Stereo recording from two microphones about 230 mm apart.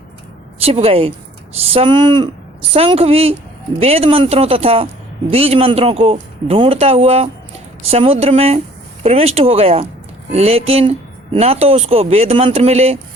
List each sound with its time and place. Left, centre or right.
0.6 s speech: right